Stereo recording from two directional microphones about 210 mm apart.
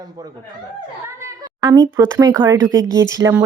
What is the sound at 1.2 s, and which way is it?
A woman's voice, 15° right (ahead or behind).